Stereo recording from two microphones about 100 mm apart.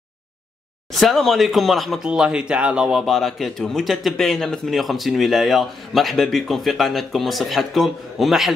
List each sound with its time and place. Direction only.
0.9 s speech: centre (ahead or behind)